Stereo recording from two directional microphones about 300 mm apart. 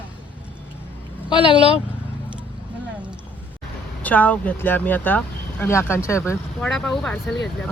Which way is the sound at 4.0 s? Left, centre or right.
Centre.